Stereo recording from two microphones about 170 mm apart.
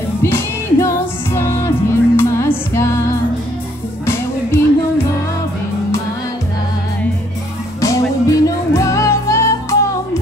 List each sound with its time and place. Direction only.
0.2 s music: 15° left (ahead or behind)
4.0 s music: 15° left (ahead or behind)
7.8 s music: 20° left (ahead or behind)